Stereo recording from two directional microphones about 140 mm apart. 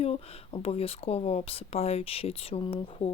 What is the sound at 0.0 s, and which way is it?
Speech, 45° left (ahead or behind).